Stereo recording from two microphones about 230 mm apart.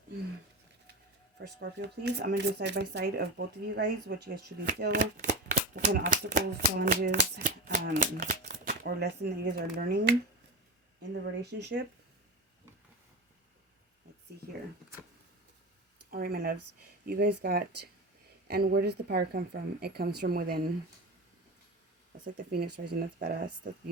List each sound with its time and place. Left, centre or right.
1.4 s speech: right
5.1 s speech: right
16.0 s speech: right
22.2 s speech: right